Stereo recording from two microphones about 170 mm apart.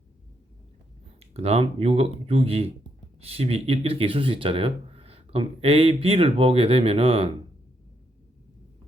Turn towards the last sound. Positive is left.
turn(degrees=-35)  # may be behind; listen again after turning